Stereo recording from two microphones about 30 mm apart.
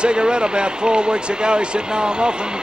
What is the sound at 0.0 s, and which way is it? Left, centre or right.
Speech, right.